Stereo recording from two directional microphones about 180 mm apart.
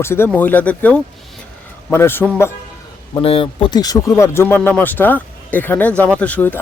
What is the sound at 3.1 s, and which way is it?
Speech, 30° left (ahead or behind).